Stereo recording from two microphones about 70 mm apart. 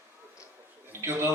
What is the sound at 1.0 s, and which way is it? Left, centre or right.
Speech, right.